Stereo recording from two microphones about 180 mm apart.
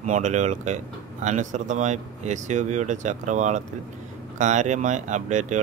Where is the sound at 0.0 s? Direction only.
45° right (ahead or behind).